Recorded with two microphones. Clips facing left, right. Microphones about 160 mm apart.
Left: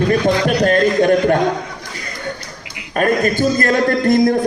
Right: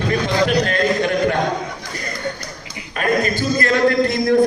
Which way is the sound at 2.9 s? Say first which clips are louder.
Left 4 dB; 45° left (ahead or behind).